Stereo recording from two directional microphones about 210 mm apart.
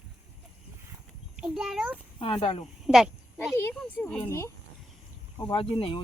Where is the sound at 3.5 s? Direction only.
10° left (ahead or behind).